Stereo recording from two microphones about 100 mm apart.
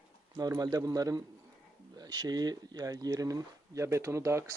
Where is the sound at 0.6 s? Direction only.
40° right (ahead or behind).